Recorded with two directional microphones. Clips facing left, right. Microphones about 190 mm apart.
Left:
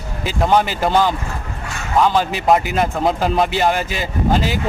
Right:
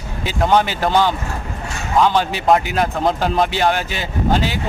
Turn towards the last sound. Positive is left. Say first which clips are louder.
# left 1 dB
turn(degrees=0)  # may be behind; listen again after turning